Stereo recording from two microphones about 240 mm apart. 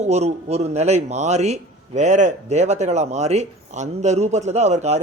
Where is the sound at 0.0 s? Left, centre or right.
Right.